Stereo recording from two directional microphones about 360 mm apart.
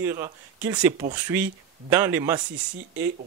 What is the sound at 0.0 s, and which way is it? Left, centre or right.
Speech, centre.